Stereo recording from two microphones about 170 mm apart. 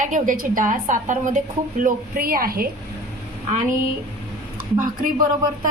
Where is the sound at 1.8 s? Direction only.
60° right (ahead or behind).